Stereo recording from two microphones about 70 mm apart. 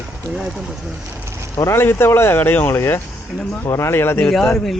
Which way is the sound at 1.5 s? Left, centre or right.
Left.